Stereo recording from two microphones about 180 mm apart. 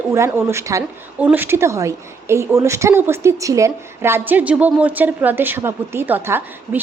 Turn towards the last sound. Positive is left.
turn(degrees=-10)  # may be behind; listen again after turning